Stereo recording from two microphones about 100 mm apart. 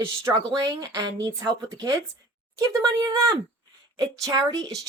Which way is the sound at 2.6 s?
40° right (ahead or behind).